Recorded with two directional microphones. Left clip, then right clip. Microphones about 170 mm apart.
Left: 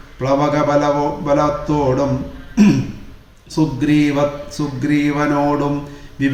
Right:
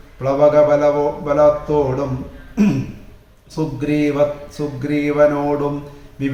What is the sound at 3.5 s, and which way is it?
Mantra, 10° right (ahead or behind).